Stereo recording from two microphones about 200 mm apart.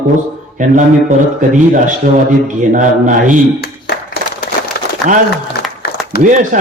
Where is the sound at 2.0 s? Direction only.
45° right (ahead or behind).